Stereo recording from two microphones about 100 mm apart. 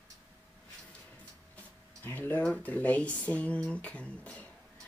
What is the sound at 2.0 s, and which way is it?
Speech, 20° left (ahead or behind).